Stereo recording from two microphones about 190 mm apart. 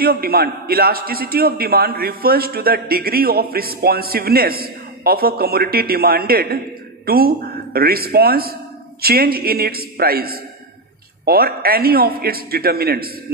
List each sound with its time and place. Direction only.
0.0 s a man's voice: 50° right (ahead or behind)